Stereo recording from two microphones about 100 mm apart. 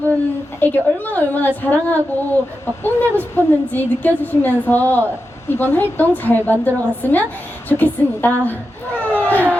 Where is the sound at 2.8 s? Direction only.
20° left (ahead or behind).